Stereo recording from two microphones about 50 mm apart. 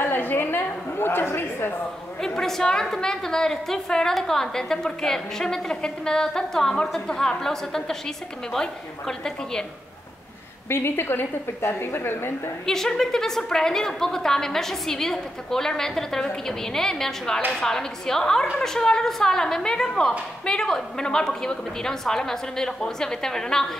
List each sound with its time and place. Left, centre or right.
0.0 s a sound: left
2.2 s a woman's voice: centre
10.7 s a woman's voice: left
12.6 s a woman's voice: centre